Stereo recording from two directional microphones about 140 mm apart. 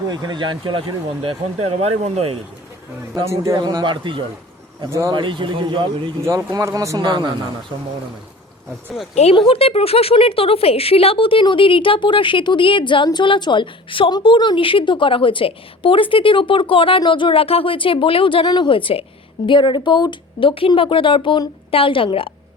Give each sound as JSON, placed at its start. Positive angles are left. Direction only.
{"t": 0.1, "sound": "speech", "side_deg": -30}
{"t": 3.5, "sound": "speech", "side_deg": -30}
{"t": 4.9, "sound": "speech", "side_deg": -20}
{"t": 5.1, "sound": "speech", "side_deg": -35}
{"t": 9.3, "sound": "a woman's voice", "side_deg": 40}